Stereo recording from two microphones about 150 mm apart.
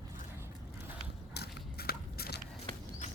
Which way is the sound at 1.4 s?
90° left.